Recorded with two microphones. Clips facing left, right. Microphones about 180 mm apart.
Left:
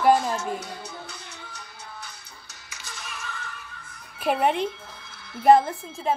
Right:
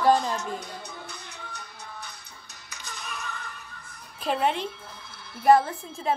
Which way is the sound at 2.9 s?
90° left.